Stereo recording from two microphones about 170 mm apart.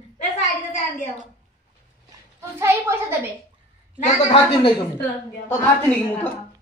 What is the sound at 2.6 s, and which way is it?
Speech, 15° right (ahead or behind).